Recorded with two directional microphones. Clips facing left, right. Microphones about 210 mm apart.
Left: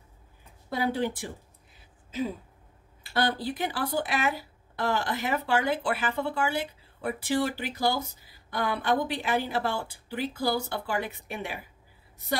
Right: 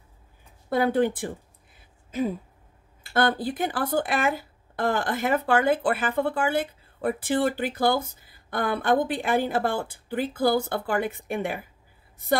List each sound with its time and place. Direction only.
0.7 s speech: 50° right (ahead or behind)
3.1 s speech: 50° right (ahead or behind)